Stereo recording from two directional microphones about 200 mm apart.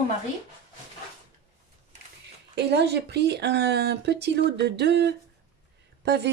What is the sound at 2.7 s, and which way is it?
Speech, 55° right (ahead or behind).